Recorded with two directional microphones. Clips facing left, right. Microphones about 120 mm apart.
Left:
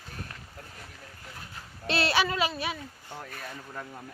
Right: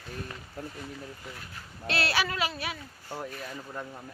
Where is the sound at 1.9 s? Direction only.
25° left (ahead or behind).